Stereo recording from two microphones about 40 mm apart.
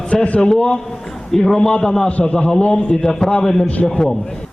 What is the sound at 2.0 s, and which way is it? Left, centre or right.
Speech, left.